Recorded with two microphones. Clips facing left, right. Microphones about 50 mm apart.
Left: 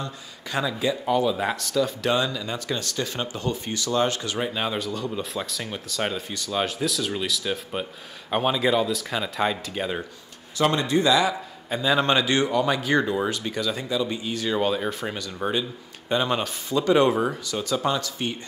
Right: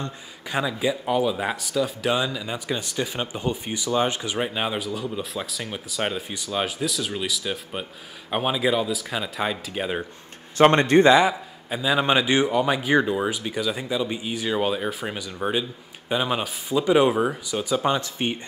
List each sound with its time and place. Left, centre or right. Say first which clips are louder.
0.5 s speech: right 1 dB; centre
10.6 s speech: right 6 dB; right
11.7 s speech: even; centre; by 18.4 s right